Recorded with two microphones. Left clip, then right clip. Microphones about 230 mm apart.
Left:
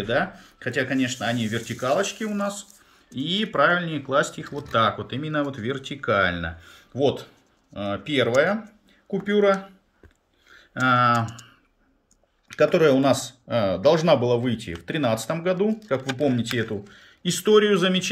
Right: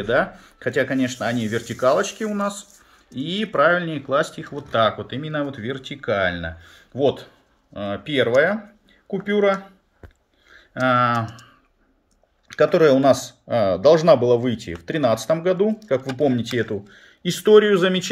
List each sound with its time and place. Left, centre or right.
0.0 s speech: centre
10.5 s speech: centre